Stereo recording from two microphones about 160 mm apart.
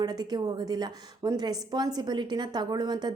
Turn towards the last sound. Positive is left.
turn(degrees=-25)  # may be behind; listen again after turning